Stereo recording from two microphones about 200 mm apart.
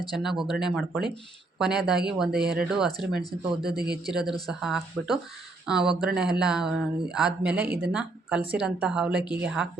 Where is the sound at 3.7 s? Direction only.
50° right (ahead or behind).